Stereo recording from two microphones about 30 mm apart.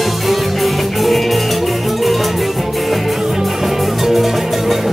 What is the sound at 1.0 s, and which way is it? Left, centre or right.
Music, centre.